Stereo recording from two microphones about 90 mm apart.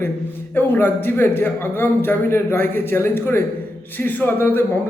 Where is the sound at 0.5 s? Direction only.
20° left (ahead or behind).